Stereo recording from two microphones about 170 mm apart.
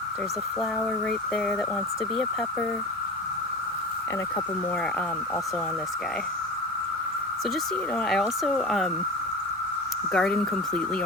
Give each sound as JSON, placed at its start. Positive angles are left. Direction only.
{"t": 7.9, "sound": "speech", "side_deg": 5}
{"t": 10.1, "sound": "speech", "side_deg": 5}